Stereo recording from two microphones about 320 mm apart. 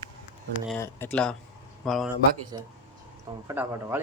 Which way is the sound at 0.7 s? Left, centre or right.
Centre.